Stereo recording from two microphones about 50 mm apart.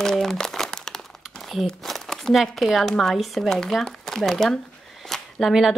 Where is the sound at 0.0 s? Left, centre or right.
Centre.